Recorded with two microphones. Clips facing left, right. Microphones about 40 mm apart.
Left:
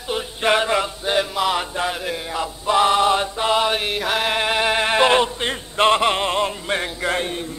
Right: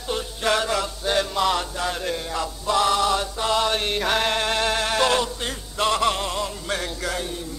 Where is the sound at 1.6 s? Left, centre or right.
Centre.